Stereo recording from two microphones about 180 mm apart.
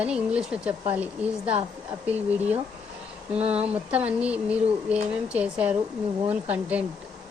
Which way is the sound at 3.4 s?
35° right (ahead or behind).